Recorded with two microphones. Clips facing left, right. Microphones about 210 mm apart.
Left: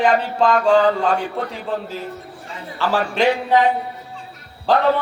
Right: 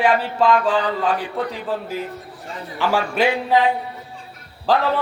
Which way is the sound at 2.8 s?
15° right (ahead or behind).